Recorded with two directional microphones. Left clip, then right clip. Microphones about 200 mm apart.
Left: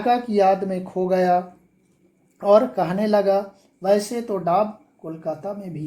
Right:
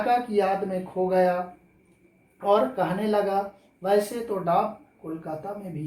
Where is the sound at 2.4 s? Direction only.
60° left (ahead or behind).